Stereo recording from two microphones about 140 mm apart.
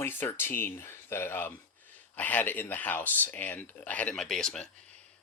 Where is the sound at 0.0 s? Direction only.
15° left (ahead or behind).